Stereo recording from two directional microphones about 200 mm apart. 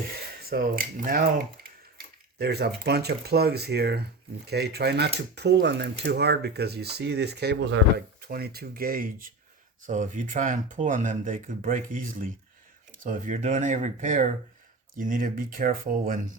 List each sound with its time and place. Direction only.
0.4 s speech: 45° right (ahead or behind)